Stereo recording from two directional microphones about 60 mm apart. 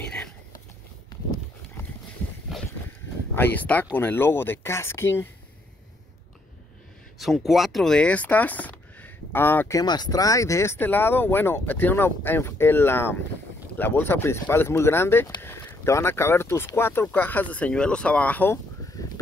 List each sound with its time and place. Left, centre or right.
0.0 s a sound: centre
2.5 s a sound: centre
3.3 s speech: left
7.4 s speech: centre
8.0 s speech: left
9.7 s speech: left
10.8 s speech: left